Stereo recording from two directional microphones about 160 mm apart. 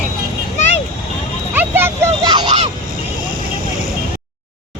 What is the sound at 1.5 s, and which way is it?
Music, 15° right (ahead or behind).